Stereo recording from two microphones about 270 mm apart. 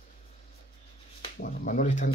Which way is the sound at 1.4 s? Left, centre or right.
Left.